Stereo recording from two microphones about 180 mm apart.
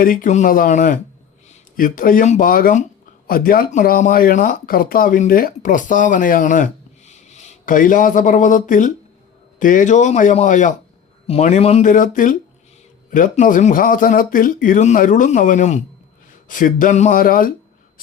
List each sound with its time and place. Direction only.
0.0 s speech: 50° left (ahead or behind)